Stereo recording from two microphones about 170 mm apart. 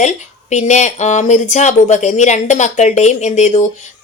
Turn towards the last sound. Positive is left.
turn(degrees=45)  # may be behind; listen again after turning